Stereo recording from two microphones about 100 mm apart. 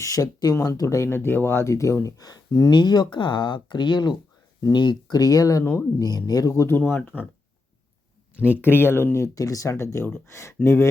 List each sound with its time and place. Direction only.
0.0 s speech: 35° left (ahead or behind)
6.7 s speech: 20° left (ahead or behind)
8.6 s speech: 25° left (ahead or behind)